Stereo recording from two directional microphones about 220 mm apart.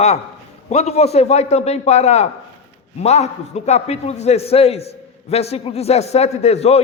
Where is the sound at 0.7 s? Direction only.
30° left (ahead or behind).